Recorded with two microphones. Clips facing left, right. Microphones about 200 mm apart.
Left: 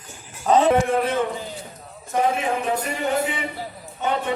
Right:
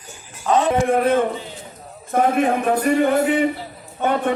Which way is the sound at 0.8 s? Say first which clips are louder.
Right 4 dB; 55° right (ahead or behind).